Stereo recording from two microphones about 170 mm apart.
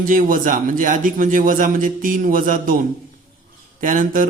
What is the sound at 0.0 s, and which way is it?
A man's voice, 55° right (ahead or behind).